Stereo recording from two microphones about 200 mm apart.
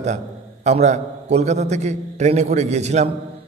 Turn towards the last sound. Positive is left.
turn(degrees=-35)  # may be behind; listen again after turning